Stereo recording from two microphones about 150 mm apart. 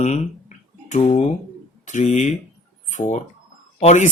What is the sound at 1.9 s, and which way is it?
Speech, 55° left (ahead or behind).